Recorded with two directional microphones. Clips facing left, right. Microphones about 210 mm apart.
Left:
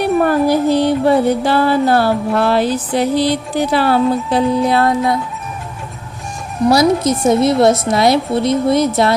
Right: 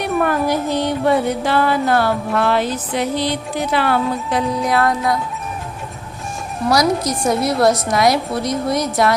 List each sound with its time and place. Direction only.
0.0 s music: 35° left (ahead or behind)
4.6 s a woman's voice: 30° left (ahead or behind)
6.7 s a woman's voice: 25° left (ahead or behind)